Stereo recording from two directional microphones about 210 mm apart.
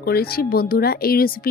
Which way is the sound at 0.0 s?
45° left (ahead or behind).